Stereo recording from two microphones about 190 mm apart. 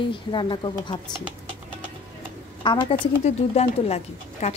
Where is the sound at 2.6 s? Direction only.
25° left (ahead or behind).